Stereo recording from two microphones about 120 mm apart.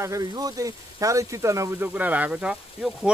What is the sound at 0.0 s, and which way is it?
Speech, 30° right (ahead or behind).